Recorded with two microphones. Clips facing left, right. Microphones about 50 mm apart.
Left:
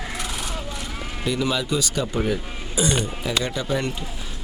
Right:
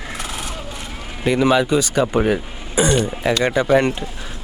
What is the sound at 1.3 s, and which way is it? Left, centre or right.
Speech, right.